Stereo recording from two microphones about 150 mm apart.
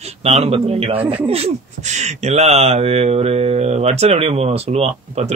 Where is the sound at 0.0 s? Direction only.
45° right (ahead or behind).